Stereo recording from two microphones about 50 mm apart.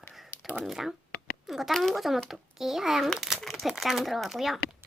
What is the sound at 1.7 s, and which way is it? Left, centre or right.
A child's voice, centre.